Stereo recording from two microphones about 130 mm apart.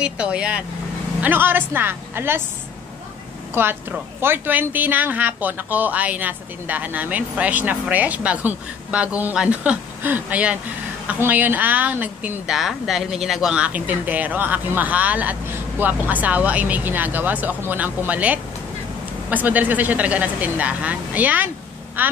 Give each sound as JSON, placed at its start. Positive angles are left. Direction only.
{"t": 0.0, "sound": "a woman's voice", "side_deg": -10}
{"t": 4.2, "sound": "a woman's voice", "side_deg": -15}